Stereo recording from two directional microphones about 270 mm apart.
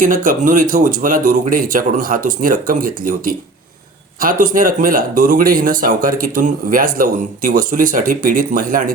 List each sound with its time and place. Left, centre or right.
0.0 s speech: right